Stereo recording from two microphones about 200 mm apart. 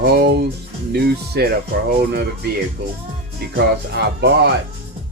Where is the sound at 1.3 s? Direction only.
55° right (ahead or behind).